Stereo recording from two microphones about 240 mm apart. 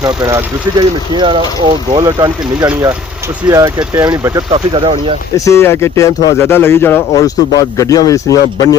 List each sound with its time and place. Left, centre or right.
0.0 s speech: centre
5.5 s speech: centre